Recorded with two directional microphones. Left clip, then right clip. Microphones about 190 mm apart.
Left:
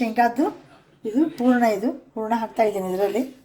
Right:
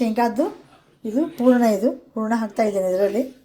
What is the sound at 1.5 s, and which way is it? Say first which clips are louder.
Speech: right 3 dB; 30° right (ahead or behind).